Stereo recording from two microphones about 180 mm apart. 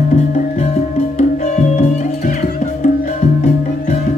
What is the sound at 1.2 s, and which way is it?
Music, 40° left (ahead or behind).